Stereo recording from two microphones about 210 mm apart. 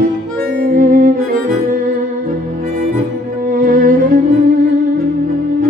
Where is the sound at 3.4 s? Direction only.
40° right (ahead or behind).